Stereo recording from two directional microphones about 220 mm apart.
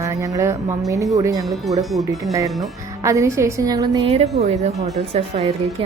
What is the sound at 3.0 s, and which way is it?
A woman's voice, 15° right (ahead or behind).